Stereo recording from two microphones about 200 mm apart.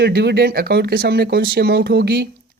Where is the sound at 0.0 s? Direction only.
55° right (ahead or behind).